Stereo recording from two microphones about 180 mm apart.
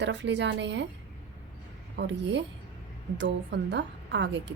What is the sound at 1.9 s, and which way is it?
A woman's voice, 75° right (ahead or behind).